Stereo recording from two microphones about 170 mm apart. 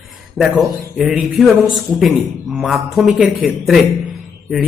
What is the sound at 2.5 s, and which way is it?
Speech, centre (ahead or behind).